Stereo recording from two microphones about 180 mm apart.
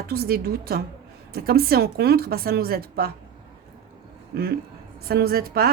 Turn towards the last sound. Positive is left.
turn(degrees=-55)  # may be behind; listen again after turning